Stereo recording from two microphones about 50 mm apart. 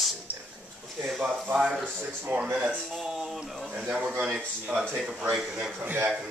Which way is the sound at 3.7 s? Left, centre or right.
Right.